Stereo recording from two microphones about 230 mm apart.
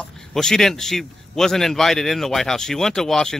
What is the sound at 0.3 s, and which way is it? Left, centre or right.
A man's voice, centre.